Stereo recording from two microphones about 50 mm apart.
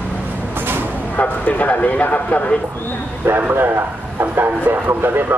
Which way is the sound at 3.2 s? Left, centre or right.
Right.